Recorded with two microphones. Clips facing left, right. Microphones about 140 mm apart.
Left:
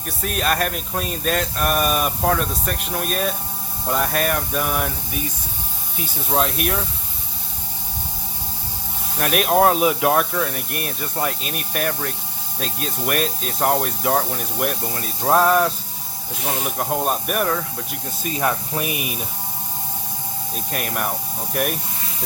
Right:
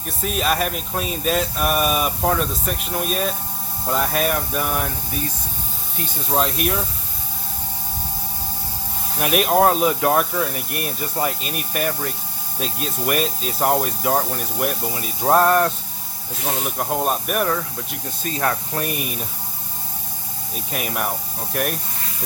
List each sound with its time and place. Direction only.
0.2 s speech: centre (ahead or behind)
9.1 s speech: centre (ahead or behind)
20.7 s speech: centre (ahead or behind)